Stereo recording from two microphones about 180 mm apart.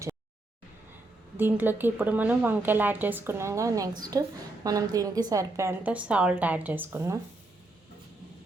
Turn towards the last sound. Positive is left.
turn(degrees=-10)  # may be behind; listen again after turning